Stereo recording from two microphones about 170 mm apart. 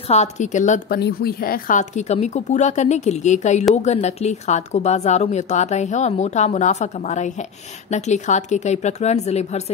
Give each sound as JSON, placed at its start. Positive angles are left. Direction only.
{"t": 0.1, "sound": "speech", "side_deg": 45}
{"t": 0.9, "sound": "speech", "side_deg": 65}